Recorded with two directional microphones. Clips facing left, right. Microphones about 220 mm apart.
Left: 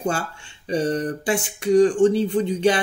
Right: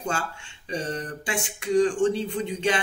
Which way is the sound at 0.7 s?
35° left (ahead or behind).